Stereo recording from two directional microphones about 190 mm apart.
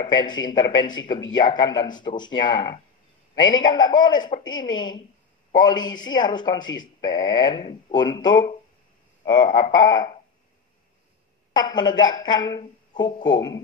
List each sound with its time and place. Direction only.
0.0 s speech: 25° left (ahead or behind)
11.5 s speech: 25° left (ahead or behind)